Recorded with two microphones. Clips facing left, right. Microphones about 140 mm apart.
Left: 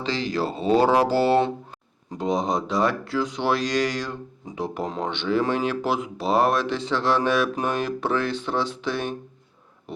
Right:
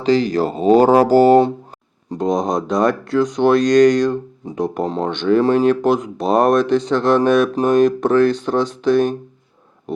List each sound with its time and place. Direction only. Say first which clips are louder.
0.0 s speech: right 10 dB; 45° right (ahead or behind)